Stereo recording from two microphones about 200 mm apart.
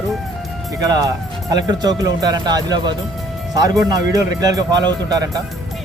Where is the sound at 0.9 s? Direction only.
20° right (ahead or behind).